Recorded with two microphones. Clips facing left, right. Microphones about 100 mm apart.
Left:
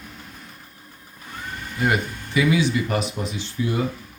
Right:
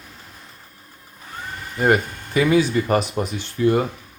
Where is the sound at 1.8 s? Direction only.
45° right (ahead or behind).